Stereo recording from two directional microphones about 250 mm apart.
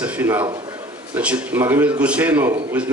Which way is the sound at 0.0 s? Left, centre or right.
Centre.